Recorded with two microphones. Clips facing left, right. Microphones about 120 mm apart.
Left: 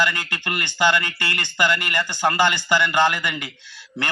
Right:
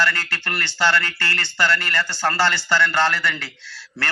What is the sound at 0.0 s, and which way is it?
A man's voice, 15° left (ahead or behind).